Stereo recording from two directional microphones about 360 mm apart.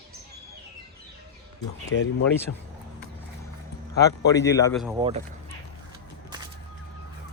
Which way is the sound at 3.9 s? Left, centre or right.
Centre.